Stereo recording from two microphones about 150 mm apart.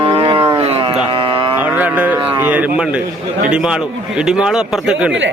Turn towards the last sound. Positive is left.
turn(degrees=-5)  # may be behind; listen again after turning